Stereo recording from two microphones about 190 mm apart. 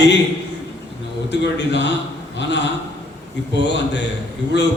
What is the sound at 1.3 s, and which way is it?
Speech, 65° left (ahead or behind).